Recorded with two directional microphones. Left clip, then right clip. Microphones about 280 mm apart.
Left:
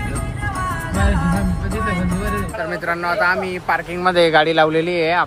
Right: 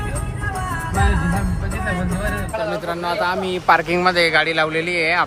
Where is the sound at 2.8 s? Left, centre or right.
Centre.